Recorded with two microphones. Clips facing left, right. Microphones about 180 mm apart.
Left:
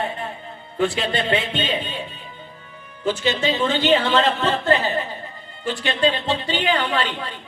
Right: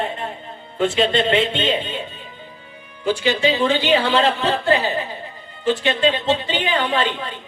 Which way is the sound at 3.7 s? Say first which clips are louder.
Right 1 dB; 10° right (ahead or behind).